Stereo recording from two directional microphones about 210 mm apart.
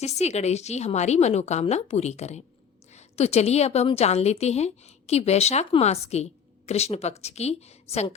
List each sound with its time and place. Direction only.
0.2 s a woman's voice: 30° left (ahead or behind)